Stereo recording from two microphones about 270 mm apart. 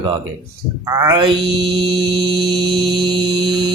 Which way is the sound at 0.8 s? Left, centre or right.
Centre.